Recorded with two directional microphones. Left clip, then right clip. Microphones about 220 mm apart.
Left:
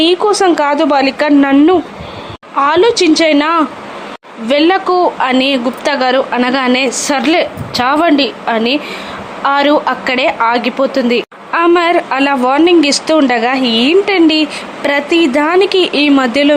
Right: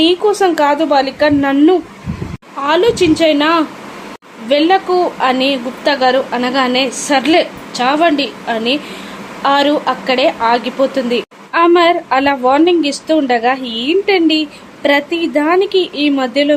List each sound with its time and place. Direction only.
0.0 s speech: 10° left (ahead or behind)